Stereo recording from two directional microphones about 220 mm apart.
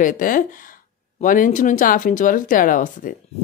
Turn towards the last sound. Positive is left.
turn(degrees=40)  # may be behind; listen again after turning